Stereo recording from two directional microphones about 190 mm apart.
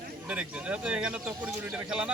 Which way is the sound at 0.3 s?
5° right (ahead or behind).